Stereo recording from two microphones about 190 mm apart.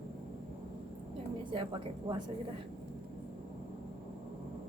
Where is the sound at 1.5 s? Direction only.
25° right (ahead or behind).